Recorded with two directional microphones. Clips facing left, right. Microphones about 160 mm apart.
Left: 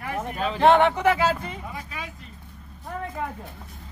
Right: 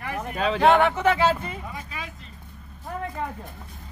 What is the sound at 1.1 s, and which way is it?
Speech, centre (ahead or behind).